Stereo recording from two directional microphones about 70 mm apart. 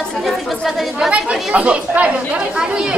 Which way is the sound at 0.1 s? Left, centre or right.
Centre.